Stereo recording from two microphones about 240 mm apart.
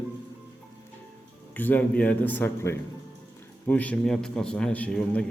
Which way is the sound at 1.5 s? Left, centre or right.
Centre.